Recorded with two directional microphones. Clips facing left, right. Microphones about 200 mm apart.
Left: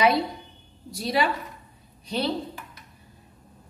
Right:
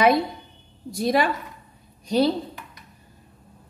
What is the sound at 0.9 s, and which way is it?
Speech, 50° right (ahead or behind).